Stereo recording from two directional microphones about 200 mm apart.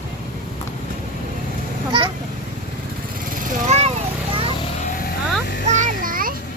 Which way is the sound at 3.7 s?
35° right (ahead or behind).